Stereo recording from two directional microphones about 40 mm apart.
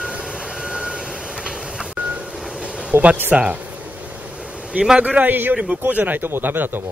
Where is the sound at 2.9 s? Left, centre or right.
Right.